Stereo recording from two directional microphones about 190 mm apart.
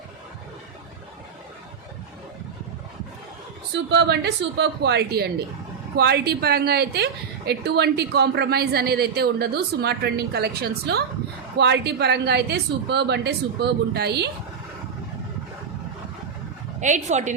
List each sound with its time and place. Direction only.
3.9 s a woman's voice: 65° right (ahead or behind)
16.8 s speech: 40° right (ahead or behind)